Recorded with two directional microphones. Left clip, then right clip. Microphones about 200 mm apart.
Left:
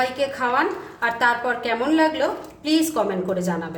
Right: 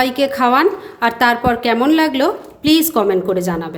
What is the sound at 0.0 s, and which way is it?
A woman's voice, 45° right (ahead or behind).